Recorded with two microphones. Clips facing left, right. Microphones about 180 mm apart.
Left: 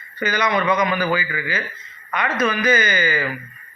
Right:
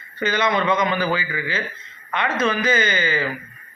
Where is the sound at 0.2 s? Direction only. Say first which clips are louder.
Even; 25° right (ahead or behind).